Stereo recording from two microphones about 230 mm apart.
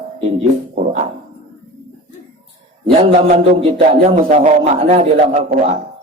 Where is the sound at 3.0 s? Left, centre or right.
Right.